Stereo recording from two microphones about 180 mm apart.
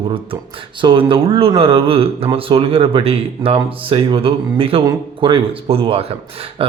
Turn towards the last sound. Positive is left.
turn(degrees=-30)  # may be behind; listen again after turning